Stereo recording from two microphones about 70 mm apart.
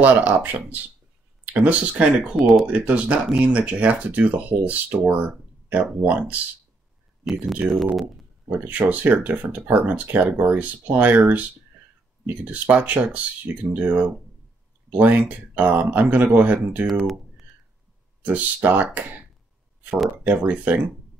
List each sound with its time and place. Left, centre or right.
0.0 s speech: right
2.3 s speech: centre
2.6 s speech: centre
7.6 s speech: centre
17.0 s a sound: centre
18.2 s speech: right
20.2 s speech: right